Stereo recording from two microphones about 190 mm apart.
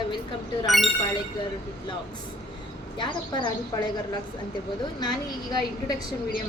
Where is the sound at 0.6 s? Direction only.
Centre (ahead or behind).